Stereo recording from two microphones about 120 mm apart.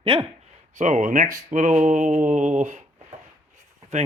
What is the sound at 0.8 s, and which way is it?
Mantra, 90° right.